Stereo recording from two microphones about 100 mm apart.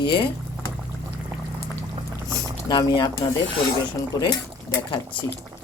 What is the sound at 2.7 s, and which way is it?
Speech, 45° left (ahead or behind).